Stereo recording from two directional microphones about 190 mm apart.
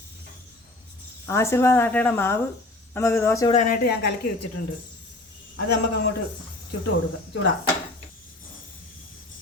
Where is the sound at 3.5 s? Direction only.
40° left (ahead or behind).